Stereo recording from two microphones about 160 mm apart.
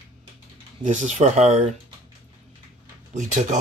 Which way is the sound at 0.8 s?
50° right (ahead or behind).